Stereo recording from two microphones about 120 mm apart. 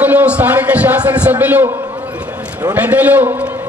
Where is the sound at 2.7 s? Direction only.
15° right (ahead or behind).